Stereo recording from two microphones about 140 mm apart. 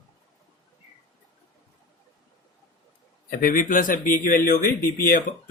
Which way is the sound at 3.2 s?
90° left.